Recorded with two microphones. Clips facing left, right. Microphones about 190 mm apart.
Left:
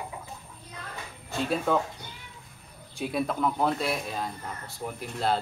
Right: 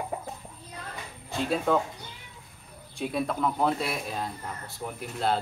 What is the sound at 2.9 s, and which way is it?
A man's voice, centre (ahead or behind).